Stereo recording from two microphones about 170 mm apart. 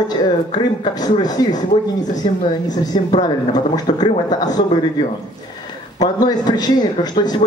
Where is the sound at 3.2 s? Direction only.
25° left (ahead or behind).